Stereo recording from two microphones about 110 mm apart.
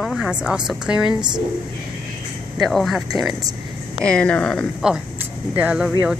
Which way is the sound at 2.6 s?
Centre (ahead or behind).